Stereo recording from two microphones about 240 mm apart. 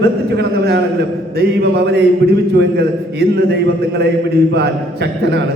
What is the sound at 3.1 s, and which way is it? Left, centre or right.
Speech, right.